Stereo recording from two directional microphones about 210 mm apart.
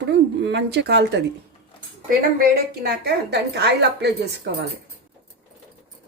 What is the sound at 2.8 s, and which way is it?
Speech, 50° right (ahead or behind).